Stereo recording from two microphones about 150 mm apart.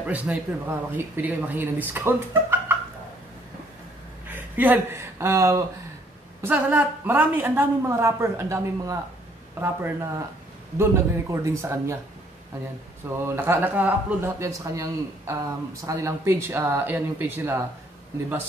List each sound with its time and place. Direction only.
0.0 s a man's voice: 10° right (ahead or behind)
4.6 s a man's voice: 15° right (ahead or behind)
13.2 s a man's voice: 15° right (ahead or behind)